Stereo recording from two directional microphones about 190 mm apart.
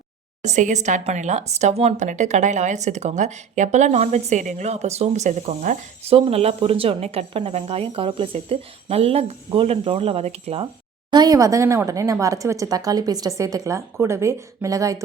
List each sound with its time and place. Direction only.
0.4 s a woman's voice: 40° right (ahead or behind)
11.1 s speech: 20° right (ahead or behind)